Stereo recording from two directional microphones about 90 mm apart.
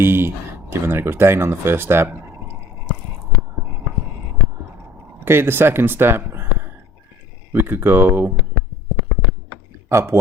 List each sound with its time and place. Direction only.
0.0 s speech: 25° right (ahead or behind)
5.2 s speech: 25° right (ahead or behind)
9.9 s speech: 30° right (ahead or behind)